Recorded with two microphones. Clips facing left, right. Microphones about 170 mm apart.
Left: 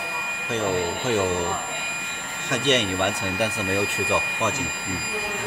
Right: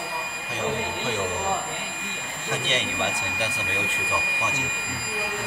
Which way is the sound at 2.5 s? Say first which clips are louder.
Left 6 dB; 75° left (ahead or behind).